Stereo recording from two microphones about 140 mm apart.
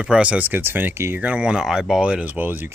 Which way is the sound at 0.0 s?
10° right (ahead or behind).